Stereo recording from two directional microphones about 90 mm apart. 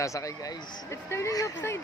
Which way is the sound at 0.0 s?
35° left (ahead or behind).